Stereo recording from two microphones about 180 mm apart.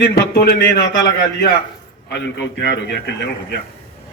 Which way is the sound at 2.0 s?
75° left (ahead or behind).